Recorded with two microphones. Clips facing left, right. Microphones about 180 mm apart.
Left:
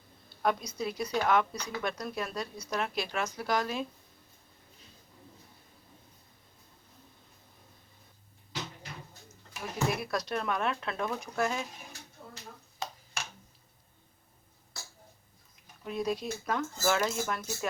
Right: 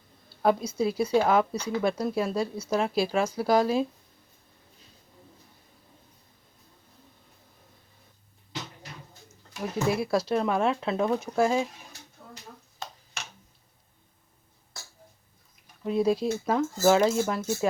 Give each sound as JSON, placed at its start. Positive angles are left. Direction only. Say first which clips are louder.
{"t": 0.4, "sound": "speech", "louder": "right 7 dB", "side_deg": -30}
{"t": 9.9, "sound": "speech", "louder": "right 7 dB", "side_deg": -30}
{"t": 15.8, "sound": "speech", "louder": "right 8 dB", "side_deg": -30}